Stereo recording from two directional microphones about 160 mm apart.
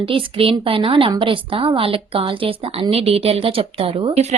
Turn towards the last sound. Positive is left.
turn(degrees=-45)  # may be behind; listen again after turning